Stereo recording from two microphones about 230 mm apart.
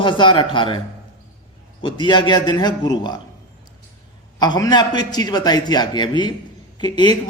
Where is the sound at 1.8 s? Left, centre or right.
Centre.